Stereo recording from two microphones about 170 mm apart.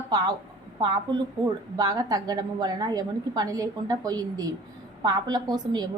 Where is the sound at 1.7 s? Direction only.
20° right (ahead or behind).